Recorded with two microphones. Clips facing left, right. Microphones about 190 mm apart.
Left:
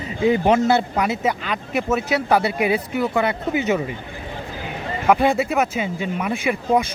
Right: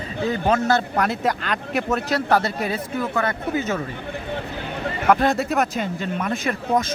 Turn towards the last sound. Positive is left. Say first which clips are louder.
# left 3 dB
turn(degrees=10)  # may be behind; listen again after turning